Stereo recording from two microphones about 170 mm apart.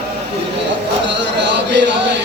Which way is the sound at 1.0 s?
90° right.